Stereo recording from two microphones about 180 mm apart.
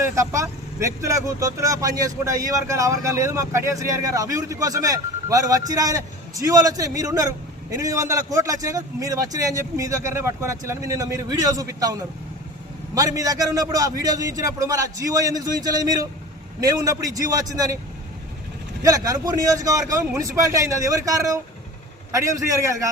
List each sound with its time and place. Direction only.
0.0 s a man's voice: 15° right (ahead or behind)
18.8 s a man's voice: 20° right (ahead or behind)